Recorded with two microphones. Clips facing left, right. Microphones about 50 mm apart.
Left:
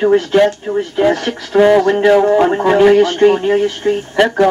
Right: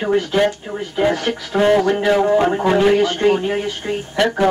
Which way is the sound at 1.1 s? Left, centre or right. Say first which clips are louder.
Left 4 dB; left.